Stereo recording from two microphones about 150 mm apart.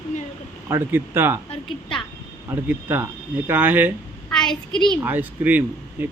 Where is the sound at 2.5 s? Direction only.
15° right (ahead or behind).